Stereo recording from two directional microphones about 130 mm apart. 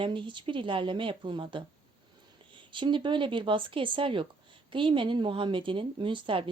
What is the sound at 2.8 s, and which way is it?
A woman's voice, 40° right (ahead or behind).